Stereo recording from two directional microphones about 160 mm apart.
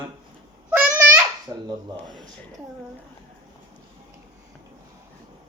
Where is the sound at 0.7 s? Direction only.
10° right (ahead or behind).